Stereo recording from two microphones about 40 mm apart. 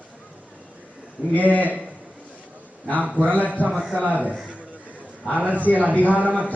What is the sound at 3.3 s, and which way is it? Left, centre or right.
Speech, left.